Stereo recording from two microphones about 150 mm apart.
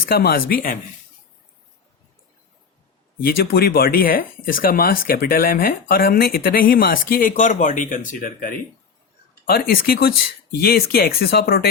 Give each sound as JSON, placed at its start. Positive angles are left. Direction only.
{"t": 0.0, "sound": "speech", "side_deg": 90}
{"t": 3.2, "sound": "speech", "side_deg": 90}
{"t": 9.5, "sound": "speech", "side_deg": 85}